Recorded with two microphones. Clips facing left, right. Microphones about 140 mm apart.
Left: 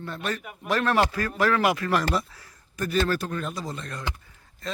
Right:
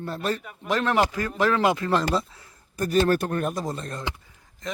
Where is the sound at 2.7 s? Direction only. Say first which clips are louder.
Right 4 dB; 40° right (ahead or behind).